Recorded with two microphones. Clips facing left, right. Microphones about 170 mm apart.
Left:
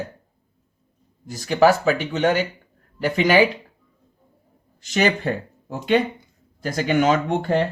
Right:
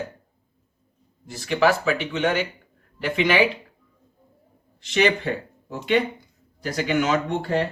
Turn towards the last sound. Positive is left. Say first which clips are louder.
# left 3 dB
turn(degrees=50)  # may be behind; listen again after turning